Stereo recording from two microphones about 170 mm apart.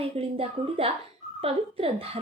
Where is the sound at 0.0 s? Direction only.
35° right (ahead or behind).